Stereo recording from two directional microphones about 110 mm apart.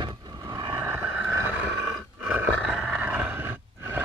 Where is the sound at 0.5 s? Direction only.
40° right (ahead or behind).